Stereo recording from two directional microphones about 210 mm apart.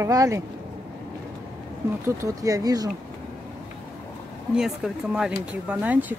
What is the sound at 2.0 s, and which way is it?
Speech, 15° right (ahead or behind).